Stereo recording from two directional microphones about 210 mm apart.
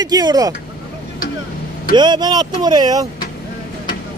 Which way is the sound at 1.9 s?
20° right (ahead or behind).